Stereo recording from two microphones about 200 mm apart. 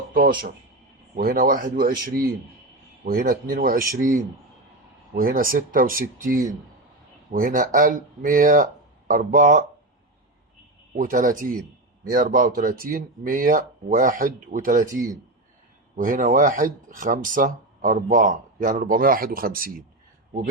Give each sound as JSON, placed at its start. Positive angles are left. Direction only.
{"t": 0.1, "sound": "speech", "side_deg": -45}
{"t": 5.1, "sound": "speech", "side_deg": -45}
{"t": 10.9, "sound": "speech", "side_deg": -40}